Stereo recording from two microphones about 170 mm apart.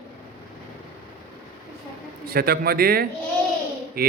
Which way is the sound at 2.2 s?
60° right (ahead or behind).